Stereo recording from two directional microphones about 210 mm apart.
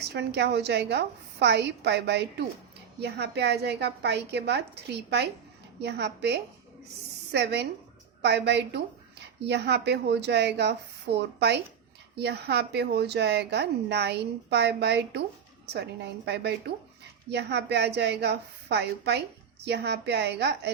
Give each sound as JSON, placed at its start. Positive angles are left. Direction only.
{"t": 0.0, "sound": "a woman's voice", "side_deg": -50}